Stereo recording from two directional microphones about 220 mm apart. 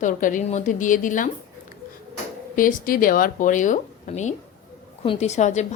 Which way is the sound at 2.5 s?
40° left (ahead or behind).